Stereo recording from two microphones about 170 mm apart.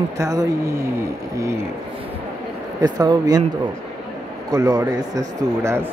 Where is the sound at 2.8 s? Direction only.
25° right (ahead or behind).